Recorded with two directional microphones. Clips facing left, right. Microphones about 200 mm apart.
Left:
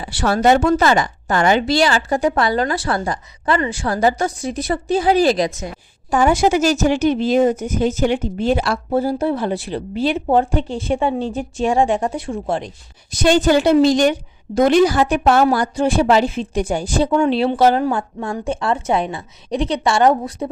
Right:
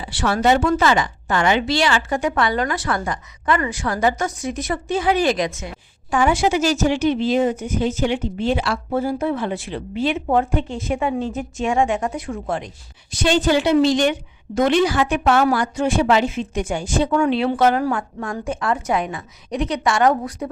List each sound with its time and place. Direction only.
0.0 s speech: 40° left (ahead or behind)